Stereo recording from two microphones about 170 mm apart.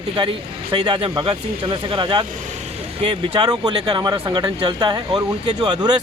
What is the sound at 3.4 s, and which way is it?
Speech, 25° right (ahead or behind).